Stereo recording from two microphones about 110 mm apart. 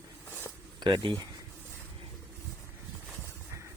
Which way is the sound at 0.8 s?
45° right (ahead or behind).